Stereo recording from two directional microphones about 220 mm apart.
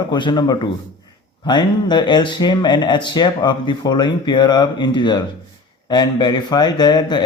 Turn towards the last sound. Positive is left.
turn(degrees=20)  # may be behind; listen again after turning